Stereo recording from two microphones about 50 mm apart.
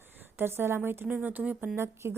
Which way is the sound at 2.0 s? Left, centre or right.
Right.